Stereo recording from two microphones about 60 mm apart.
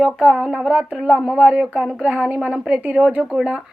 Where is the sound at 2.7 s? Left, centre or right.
Right.